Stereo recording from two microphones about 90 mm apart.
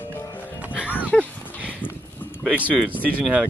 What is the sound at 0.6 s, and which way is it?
Music, 15° right (ahead or behind).